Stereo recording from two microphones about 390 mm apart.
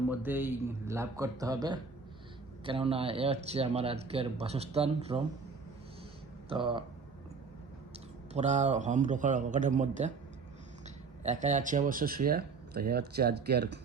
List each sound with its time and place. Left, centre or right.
0.1 s speech: centre
6.5 s speech: centre
8.3 s a man's voice: centre